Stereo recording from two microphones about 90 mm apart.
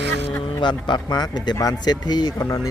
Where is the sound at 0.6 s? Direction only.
55° left (ahead or behind).